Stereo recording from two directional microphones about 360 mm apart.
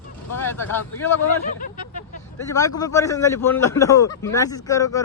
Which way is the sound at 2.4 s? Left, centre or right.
Centre.